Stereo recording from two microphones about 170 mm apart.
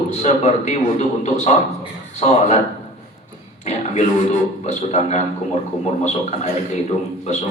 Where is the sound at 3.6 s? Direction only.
45° left (ahead or behind).